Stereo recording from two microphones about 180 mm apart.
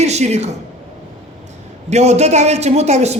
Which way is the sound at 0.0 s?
40° right (ahead or behind).